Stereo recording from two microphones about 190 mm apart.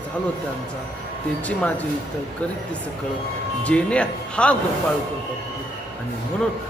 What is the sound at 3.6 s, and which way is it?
Speech, 5° left (ahead or behind).